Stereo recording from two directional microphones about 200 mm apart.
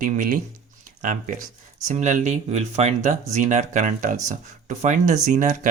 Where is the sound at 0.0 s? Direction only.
40° right (ahead or behind).